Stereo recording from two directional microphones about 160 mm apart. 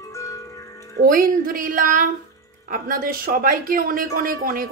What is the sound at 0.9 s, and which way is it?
Speech, 65° right (ahead or behind).